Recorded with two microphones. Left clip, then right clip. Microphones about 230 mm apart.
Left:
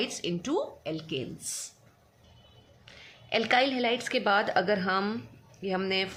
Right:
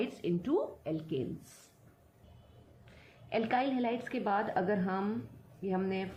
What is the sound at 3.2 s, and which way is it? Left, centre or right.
Speech, left.